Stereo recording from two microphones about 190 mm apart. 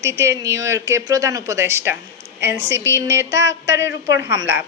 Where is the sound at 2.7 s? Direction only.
70° right (ahead or behind).